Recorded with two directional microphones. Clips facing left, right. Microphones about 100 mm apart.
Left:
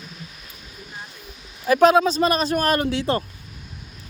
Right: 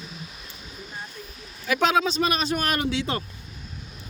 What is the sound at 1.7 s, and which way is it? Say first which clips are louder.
Speech: left 7 dB; 45° left (ahead or behind).